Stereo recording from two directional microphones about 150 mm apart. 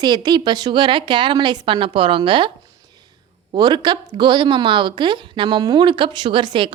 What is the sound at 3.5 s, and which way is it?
A woman's voice, 30° right (ahead or behind).